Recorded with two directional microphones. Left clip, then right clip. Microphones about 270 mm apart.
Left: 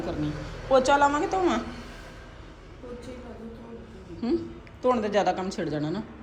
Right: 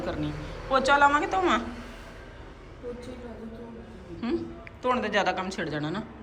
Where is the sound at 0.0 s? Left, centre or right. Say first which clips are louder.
Left 1 dB; centre.